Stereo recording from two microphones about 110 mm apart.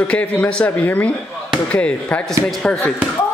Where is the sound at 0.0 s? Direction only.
10° left (ahead or behind).